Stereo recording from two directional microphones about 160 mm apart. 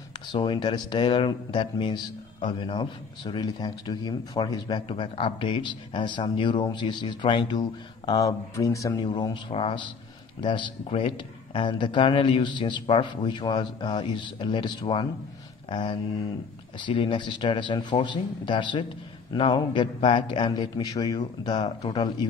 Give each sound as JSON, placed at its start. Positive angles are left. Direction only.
{"t": 0.3, "sound": "a man's voice", "side_deg": 30}